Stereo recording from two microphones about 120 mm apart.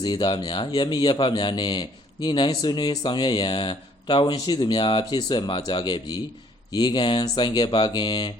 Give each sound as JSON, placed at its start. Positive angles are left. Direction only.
{"t": 0.0, "sound": "speech", "side_deg": 40}